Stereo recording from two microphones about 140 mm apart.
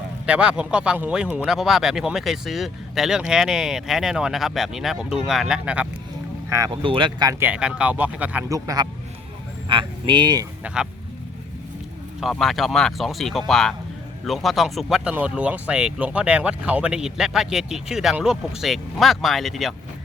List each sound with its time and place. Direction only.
0.3 s speech: 5° right (ahead or behind)
6.5 s speech: 25° right (ahead or behind)
6.8 s speech: 35° right (ahead or behind)
7.3 s speech: 15° right (ahead or behind)
8.4 s speech: 25° right (ahead or behind)
9.6 s speech: 35° right (ahead or behind)
12.2 s speech: centre (ahead or behind)